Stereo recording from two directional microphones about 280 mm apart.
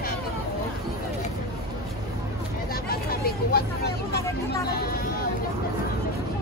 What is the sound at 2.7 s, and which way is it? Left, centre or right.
Hubbub, left.